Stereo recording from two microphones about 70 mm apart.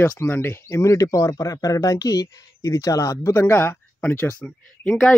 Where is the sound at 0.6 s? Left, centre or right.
Left.